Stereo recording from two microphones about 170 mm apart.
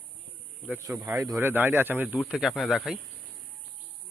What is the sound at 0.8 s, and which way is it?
Speech, 15° right (ahead or behind).